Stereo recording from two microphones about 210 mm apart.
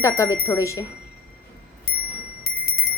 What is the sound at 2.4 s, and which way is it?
Clock, 45° left (ahead or behind).